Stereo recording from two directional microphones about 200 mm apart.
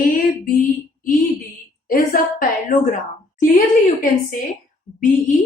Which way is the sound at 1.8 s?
45° left (ahead or behind).